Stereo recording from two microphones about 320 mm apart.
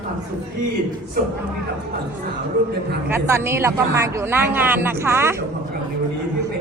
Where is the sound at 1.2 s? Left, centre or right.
Right.